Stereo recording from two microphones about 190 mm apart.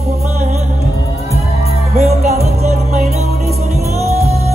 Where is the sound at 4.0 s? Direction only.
35° right (ahead or behind).